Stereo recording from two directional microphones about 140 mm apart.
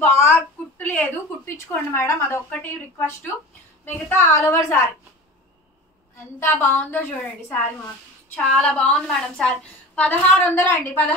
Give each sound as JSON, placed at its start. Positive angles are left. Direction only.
{"t": 0.0, "sound": "a woman's voice", "side_deg": 15}
{"t": 3.8, "sound": "a woman's voice", "side_deg": 20}
{"t": 6.5, "sound": "a woman's voice", "side_deg": 15}